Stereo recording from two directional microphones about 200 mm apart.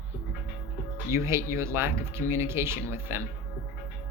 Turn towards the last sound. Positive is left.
turn(degrees=-10)  # may be behind; listen again after turning